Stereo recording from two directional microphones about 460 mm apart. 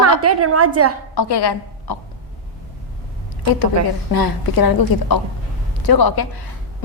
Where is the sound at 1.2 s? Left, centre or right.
Left.